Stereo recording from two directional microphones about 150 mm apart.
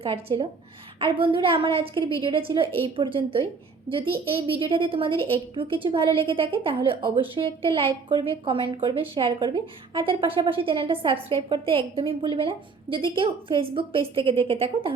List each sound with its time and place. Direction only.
0.0 s speech: 40° right (ahead or behind)